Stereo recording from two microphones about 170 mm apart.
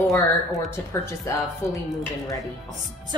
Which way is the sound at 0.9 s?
15° left (ahead or behind).